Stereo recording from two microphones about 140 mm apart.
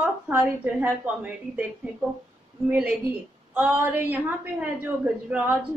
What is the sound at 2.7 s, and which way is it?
A woman's voice, 10° right (ahead or behind).